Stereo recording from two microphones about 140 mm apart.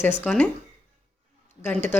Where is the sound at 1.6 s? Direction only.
15° left (ahead or behind).